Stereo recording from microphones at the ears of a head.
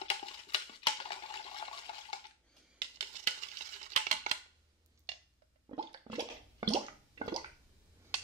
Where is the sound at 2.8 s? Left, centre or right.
Right.